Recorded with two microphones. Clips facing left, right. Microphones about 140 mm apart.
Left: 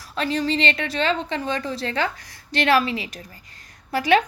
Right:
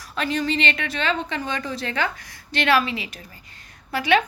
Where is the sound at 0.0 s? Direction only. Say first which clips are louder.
Left 1 dB; 30° left (ahead or behind).